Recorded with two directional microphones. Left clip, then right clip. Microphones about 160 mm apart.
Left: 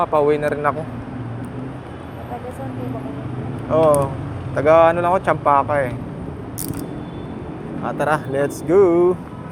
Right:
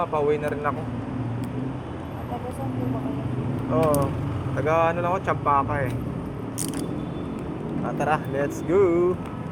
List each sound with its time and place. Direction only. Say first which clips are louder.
0.0 s speech: left 7 dB; 85° left
3.7 s speech: left 8 dB; 65° left (ahead or behind); by 5.9 s 85° left
7.9 s speech: left 5 dB; 90° left